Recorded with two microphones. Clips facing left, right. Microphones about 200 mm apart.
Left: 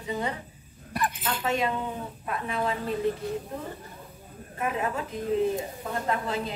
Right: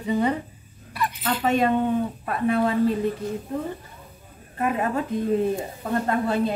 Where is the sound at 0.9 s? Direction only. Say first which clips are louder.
Right 1 dB; 45° left (ahead or behind).